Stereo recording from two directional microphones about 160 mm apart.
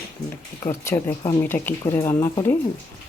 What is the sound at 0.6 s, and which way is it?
Speech, 15° left (ahead or behind).